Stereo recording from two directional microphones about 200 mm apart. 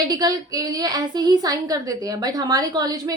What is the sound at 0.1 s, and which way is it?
A woman's voice, 20° right (ahead or behind).